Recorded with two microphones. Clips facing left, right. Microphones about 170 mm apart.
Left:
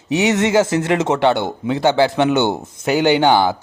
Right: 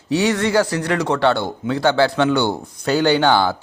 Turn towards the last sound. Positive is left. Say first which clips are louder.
# left 2 dB
turn(degrees=15)  # may be behind; listen again after turning